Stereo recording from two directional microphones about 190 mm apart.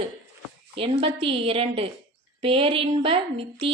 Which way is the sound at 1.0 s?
30° right (ahead or behind).